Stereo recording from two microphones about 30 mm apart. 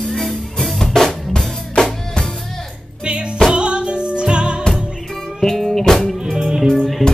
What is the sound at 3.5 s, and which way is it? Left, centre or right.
Music, right.